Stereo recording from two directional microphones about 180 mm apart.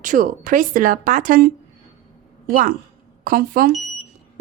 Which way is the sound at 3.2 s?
50° right (ahead or behind).